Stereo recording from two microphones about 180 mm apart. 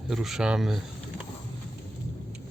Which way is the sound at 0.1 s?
Centre (ahead or behind).